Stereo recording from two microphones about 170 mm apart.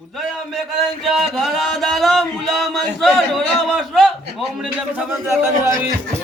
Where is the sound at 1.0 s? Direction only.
Centre (ahead or behind).